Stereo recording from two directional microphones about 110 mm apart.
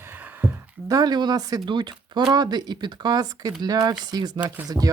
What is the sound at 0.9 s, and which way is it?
Speech, 35° right (ahead or behind).